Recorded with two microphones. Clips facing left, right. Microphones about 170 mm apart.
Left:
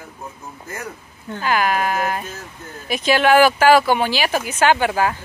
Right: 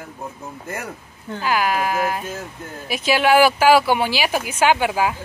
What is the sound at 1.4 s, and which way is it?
Speech, 5° right (ahead or behind).